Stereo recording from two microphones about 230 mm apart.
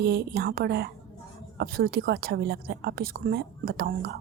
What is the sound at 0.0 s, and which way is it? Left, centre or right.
A woman's voice, right.